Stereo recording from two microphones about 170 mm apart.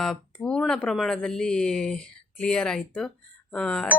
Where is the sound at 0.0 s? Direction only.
5° left (ahead or behind).